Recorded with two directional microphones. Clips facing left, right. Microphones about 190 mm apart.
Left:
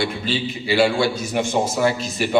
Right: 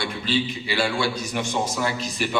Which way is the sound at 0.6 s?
25° left (ahead or behind).